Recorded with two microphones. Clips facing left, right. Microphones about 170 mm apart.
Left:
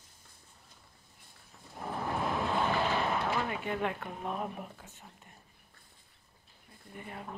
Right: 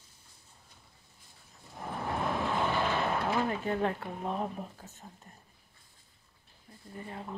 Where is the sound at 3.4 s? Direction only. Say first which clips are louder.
Right 3 dB; 35° right (ahead or behind).